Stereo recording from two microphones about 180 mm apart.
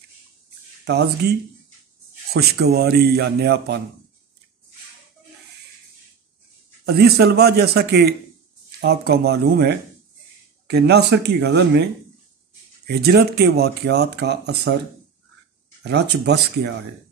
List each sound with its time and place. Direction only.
0.8 s speech: 65° right (ahead or behind)
2.3 s speech: 60° right (ahead or behind)
6.9 s speech: 60° right (ahead or behind)
15.8 s speech: 70° right (ahead or behind)